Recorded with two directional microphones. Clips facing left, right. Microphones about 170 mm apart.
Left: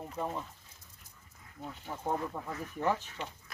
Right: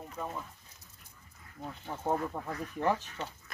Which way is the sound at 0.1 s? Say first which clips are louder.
Left 3 dB; 25° left (ahead or behind).